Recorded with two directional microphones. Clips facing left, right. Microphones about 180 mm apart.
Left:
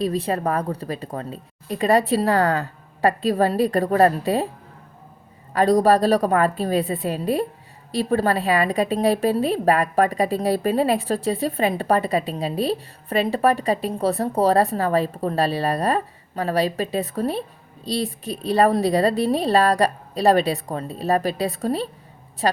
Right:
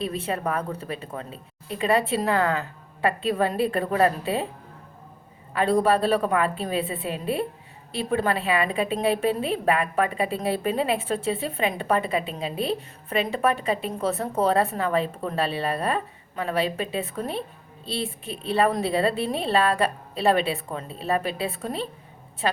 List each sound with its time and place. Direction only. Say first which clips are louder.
0.0 s a woman's voice: left 5 dB; 35° left (ahead or behind)
5.5 s a woman's voice: left 4 dB; 40° left (ahead or behind)